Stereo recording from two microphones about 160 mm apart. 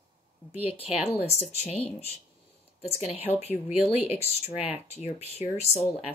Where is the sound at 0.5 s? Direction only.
35° left (ahead or behind).